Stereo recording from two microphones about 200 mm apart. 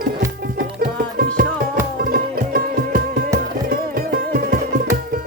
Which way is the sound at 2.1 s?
45° right (ahead or behind).